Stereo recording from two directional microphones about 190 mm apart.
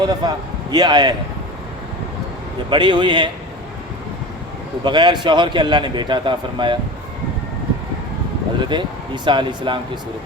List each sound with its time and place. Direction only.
0.0 s a man's voice: 20° right (ahead or behind)
2.6 s a man's voice: 25° right (ahead or behind)
4.8 s a man's voice: 25° right (ahead or behind)
8.6 s a man's voice: 25° right (ahead or behind)